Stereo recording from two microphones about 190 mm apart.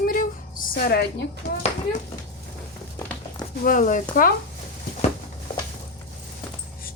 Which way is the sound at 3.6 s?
45° left (ahead or behind).